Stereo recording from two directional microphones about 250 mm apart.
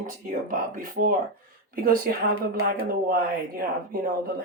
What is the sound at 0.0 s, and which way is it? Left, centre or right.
Speech, right.